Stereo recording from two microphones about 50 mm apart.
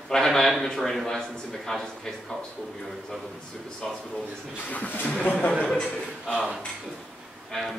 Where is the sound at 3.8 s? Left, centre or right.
Centre.